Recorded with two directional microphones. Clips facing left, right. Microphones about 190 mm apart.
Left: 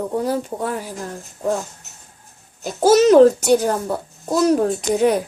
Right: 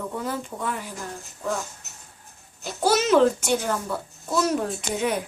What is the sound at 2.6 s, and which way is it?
A child's voice, 40° left (ahead or behind).